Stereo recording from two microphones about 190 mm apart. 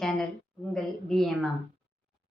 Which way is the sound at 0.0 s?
Centre (ahead or behind).